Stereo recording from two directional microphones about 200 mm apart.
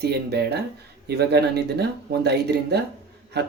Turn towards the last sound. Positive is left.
turn(degrees=-55)  # may be behind; listen again after turning